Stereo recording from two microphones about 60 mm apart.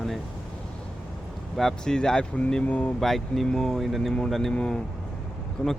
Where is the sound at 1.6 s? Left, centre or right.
Centre.